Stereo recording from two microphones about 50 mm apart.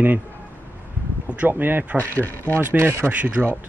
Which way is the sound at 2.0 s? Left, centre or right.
Left.